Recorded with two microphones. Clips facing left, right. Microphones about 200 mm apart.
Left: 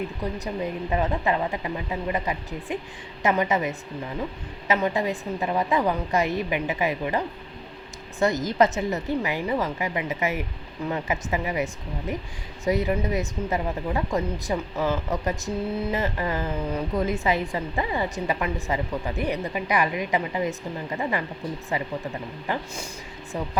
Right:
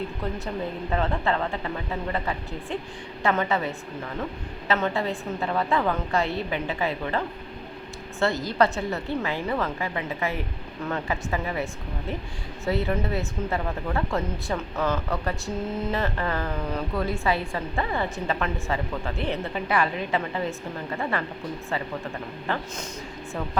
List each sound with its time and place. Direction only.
0.3 s speech: 15° left (ahead or behind)
4.7 s speech: 15° left (ahead or behind)
8.4 s a woman's voice: 20° left (ahead or behind)
22.4 s speech: 10° left (ahead or behind)